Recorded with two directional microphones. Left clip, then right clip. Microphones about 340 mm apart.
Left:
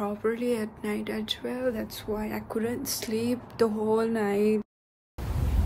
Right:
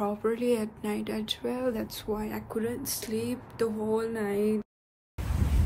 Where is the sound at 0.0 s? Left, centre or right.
Centre.